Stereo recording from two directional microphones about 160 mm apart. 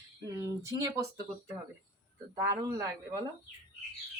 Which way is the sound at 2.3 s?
25° right (ahead or behind).